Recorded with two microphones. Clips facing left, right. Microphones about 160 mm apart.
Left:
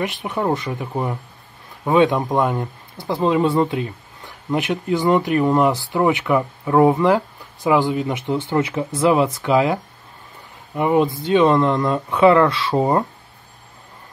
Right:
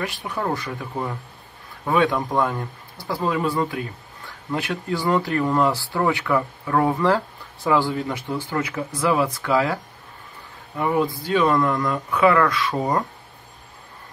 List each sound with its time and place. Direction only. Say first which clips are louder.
0.0 s speech: left 4 dB; 20° left (ahead or behind)
10.8 s speech: left 4 dB; 20° left (ahead or behind)